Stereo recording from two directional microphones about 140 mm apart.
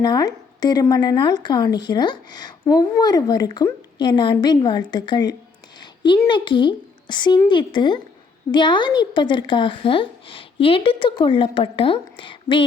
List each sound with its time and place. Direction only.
0.0 s speech: 30° left (ahead or behind)
5.8 s a sound: 35° left (ahead or behind)
6.2 s speech: 35° left (ahead or behind)